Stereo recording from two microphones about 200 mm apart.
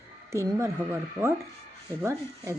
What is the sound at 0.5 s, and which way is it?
Speech, 15° right (ahead or behind).